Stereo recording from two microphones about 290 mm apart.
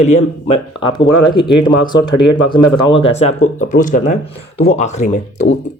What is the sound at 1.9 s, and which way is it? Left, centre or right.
Speech, left.